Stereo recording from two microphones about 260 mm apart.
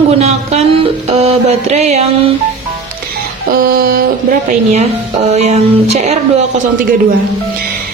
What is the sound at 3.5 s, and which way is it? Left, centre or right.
Speech, right.